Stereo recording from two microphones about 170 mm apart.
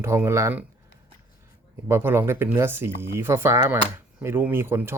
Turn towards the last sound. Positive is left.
turn(degrees=-15)  # may be behind; listen again after turning